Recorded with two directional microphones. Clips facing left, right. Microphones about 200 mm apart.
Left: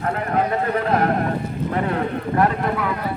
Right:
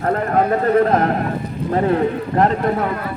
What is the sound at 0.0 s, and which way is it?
Speech, 45° right (ahead or behind).